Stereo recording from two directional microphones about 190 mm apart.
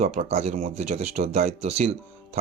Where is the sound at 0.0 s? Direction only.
35° right (ahead or behind).